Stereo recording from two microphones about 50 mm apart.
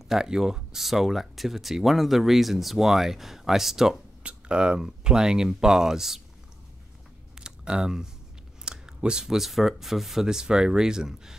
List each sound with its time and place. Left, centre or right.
0.1 s speech: centre
4.2 s speech: right
7.3 s a sound: centre
8.6 s speech: centre